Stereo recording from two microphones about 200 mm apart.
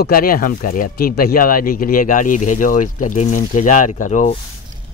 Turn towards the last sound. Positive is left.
turn(degrees=40)  # may be behind; listen again after turning